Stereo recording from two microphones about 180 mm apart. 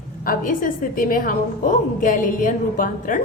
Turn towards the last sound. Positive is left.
turn(degrees=50)  # may be behind; listen again after turning